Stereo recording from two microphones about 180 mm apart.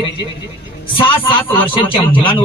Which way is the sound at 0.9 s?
30° left (ahead or behind).